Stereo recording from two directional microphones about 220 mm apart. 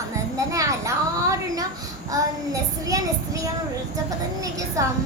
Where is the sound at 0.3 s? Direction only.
15° right (ahead or behind).